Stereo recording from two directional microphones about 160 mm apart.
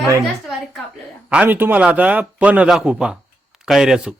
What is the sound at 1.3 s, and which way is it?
A man's voice, 10° right (ahead or behind).